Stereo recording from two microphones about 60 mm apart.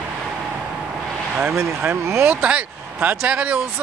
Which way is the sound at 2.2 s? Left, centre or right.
Right.